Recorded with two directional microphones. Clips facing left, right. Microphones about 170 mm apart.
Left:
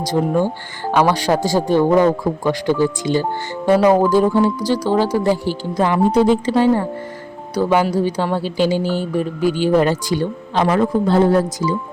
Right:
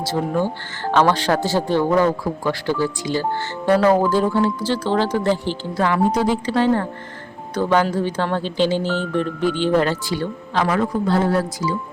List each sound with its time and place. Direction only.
0.0 s speech: 15° left (ahead or behind)